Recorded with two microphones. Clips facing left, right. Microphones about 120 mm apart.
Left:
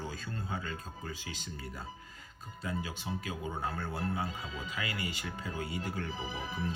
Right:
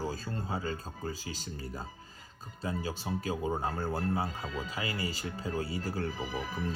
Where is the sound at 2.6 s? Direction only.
35° right (ahead or behind).